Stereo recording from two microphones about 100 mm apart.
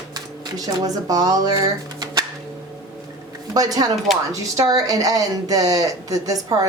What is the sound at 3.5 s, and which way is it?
Speech, 40° right (ahead or behind).